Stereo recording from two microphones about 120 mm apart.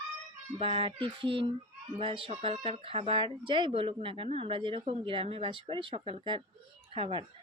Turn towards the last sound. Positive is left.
turn(degrees=-50)  # may be behind; listen again after turning